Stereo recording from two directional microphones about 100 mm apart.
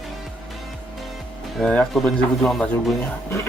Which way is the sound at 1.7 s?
5° left (ahead or behind).